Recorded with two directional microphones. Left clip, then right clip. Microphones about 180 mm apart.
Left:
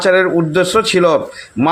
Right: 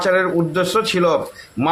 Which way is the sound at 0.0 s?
20° left (ahead or behind).